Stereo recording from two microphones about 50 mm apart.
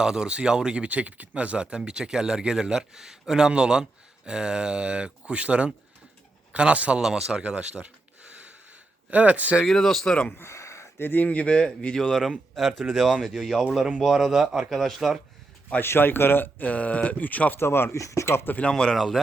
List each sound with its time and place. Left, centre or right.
0.0 s speech: centre
7.0 s speech: centre
7.4 s speech: right
9.0 s speech: right
9.6 s speech: centre
10.3 s a sound: left
10.9 s speech: left; by 11.9 s centre
12.5 s speech: centre
14.7 s speech: centre
15.8 s speech: left
17.6 s speech: left
17.9 s speech: left
18.3 s speech: left
18.9 s speech: centre